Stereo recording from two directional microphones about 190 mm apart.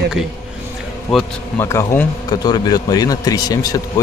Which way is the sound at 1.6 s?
15° left (ahead or behind).